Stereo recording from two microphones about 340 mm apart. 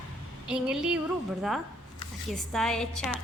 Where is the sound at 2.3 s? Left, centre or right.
Centre.